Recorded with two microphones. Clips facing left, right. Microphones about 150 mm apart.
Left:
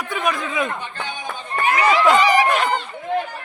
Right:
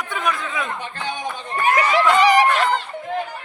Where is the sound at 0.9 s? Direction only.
85° right.